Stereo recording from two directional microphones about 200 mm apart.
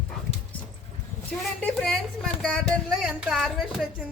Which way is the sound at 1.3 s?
5° left (ahead or behind).